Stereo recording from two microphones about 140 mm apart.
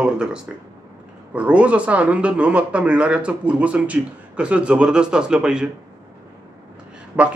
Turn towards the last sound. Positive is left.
turn(degrees=-10)  # may be behind; listen again after turning